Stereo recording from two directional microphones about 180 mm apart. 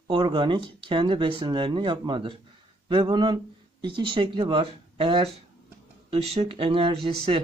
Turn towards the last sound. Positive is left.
turn(degrees=-30)  # may be behind; listen again after turning